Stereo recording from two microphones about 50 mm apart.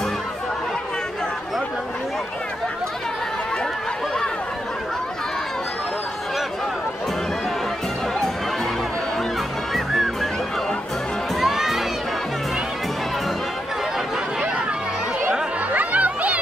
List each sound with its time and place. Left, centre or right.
11.4 s crowd: centre
15.7 s music: right